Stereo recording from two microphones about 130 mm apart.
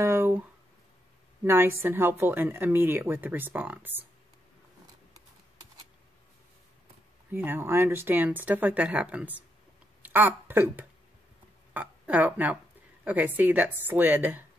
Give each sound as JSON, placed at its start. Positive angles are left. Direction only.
{"t": 0.0, "sound": "a sound", "side_deg": -20}
{"t": 1.4, "sound": "speech", "side_deg": -20}
{"t": 7.3, "sound": "speech", "side_deg": -15}